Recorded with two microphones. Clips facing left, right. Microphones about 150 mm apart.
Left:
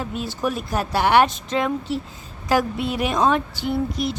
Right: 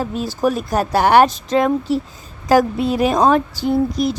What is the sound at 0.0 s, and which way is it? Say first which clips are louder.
Speech: right 6 dB; 40° right (ahead or behind).